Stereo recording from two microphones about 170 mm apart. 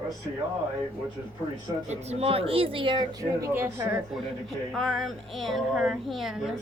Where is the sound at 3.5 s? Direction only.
15° right (ahead or behind).